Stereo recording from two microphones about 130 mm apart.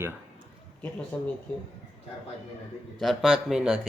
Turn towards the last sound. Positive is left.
turn(degrees=-5)  # may be behind; listen again after turning